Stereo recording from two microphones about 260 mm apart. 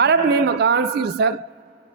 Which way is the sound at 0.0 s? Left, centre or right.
Right.